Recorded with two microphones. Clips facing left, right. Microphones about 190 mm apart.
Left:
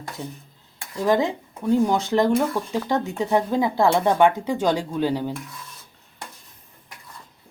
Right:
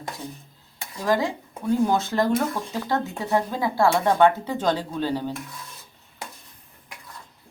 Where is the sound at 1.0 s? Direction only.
20° left (ahead or behind).